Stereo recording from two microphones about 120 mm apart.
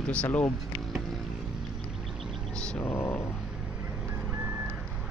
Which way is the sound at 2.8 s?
20° left (ahead or behind).